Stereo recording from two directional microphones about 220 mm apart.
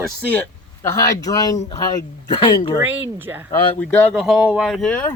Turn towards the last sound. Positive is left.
turn(degrees=5)  # may be behind; listen again after turning